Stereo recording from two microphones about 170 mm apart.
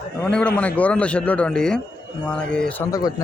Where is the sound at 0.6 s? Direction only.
10° left (ahead or behind).